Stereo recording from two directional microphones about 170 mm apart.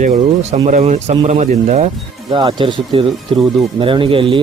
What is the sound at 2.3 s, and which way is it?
Speech, 30° right (ahead or behind).